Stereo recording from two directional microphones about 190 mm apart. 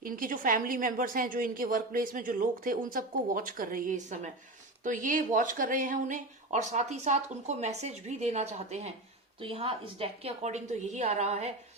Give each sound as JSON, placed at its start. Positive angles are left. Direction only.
{"t": 0.0, "sound": "a woman's voice", "side_deg": -45}